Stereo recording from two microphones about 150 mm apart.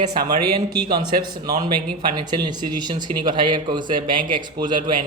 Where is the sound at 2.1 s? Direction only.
30° right (ahead or behind).